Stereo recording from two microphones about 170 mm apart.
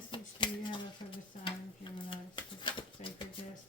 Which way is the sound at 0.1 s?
30° left (ahead or behind).